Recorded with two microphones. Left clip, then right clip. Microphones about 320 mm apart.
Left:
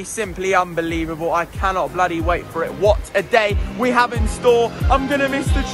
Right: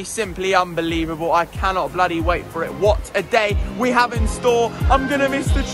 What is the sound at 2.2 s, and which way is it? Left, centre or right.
Speech, centre.